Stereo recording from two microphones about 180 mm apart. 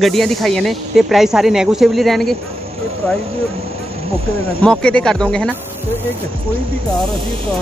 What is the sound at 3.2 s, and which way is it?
Vehicle, 35° right (ahead or behind).